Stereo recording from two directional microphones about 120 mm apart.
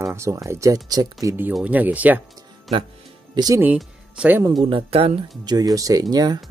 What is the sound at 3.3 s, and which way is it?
Speech, 30° right (ahead or behind).